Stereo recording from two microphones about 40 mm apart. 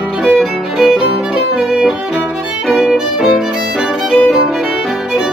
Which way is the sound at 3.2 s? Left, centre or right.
Centre.